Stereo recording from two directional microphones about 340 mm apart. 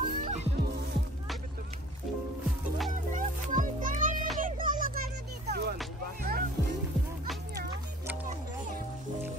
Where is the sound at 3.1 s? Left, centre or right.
Right.